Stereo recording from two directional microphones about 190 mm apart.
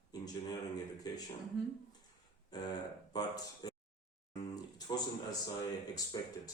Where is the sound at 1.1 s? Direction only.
20° left (ahead or behind).